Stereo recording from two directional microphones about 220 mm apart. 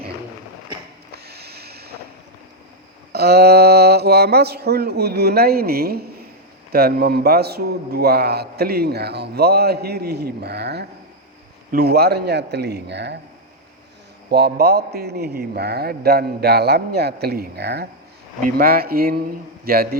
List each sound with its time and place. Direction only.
1.1 s snort: 45° right (ahead or behind)
3.1 s a sound: 45° right (ahead or behind)
6.7 s a man's voice: 45° right (ahead or behind)
14.3 s a man's voice: 50° right (ahead or behind)